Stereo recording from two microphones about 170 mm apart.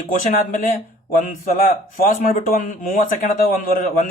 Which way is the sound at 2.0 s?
55° left (ahead or behind).